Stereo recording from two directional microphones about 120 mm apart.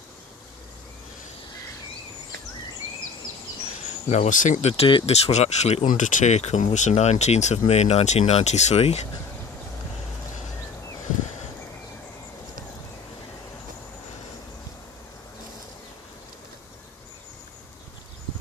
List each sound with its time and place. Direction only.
3.7 s speech: 80° left
5.0 s speech: 60° left (ahead or behind)